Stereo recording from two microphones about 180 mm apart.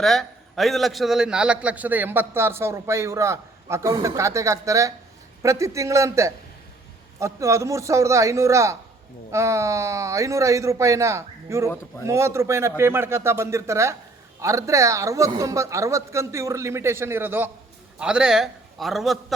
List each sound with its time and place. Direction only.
0.0 s a man's voice: centre (ahead or behind)